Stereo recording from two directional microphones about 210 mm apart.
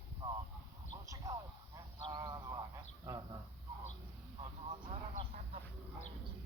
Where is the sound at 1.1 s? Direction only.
15° right (ahead or behind).